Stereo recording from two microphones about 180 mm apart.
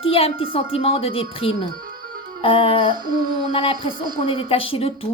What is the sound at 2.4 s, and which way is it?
Music, 30° left (ahead or behind).